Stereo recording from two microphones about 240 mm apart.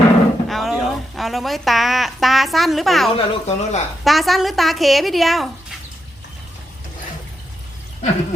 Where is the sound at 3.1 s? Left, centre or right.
Left.